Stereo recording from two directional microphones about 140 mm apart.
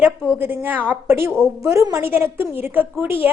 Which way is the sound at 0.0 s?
15° right (ahead or behind).